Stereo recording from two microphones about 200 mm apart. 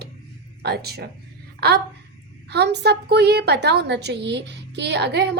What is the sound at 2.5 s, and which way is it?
A woman's voice, 55° right (ahead or behind).